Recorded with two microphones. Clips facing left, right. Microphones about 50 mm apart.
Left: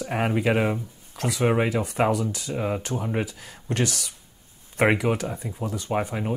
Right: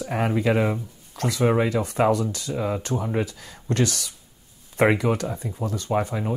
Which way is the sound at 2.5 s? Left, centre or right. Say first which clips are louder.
Right 1 dB; centre.